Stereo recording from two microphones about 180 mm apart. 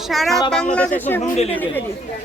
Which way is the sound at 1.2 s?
35° left (ahead or behind).